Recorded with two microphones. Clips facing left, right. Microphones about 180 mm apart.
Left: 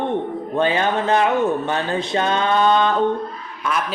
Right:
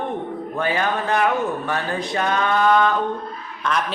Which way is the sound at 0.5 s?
25° left (ahead or behind).